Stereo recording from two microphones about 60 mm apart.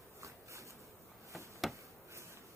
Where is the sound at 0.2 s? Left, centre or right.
Right.